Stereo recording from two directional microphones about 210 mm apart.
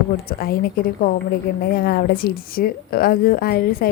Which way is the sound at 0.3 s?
45° left (ahead or behind).